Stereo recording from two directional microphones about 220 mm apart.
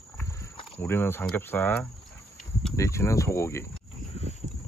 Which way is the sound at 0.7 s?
10° left (ahead or behind).